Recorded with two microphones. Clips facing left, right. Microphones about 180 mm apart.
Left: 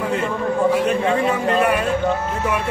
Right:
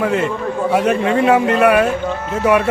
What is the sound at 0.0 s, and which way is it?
A man's voice, 75° right (ahead or behind).